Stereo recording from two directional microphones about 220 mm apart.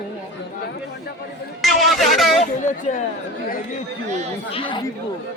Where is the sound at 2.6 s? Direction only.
35° left (ahead or behind).